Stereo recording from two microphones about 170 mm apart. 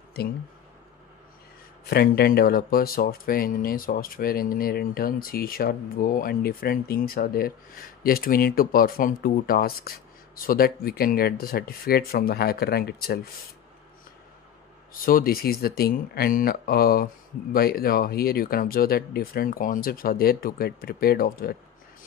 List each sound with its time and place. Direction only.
1.9 s speech: 65° left (ahead or behind)
15.0 s speech: 60° left (ahead or behind)